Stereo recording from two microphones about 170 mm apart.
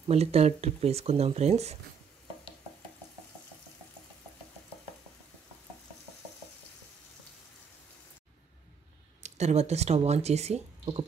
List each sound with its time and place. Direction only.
0.1 s speech: 35° right (ahead or behind)
9.2 s speech: 40° right (ahead or behind)